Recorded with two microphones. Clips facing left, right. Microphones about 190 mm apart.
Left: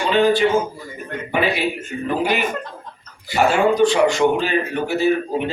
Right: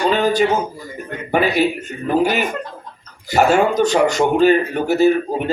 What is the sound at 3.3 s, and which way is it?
A man's voice, 45° right (ahead or behind).